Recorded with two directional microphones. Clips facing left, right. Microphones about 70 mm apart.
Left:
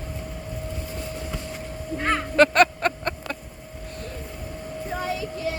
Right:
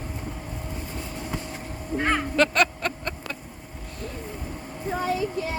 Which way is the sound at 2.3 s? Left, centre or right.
Left.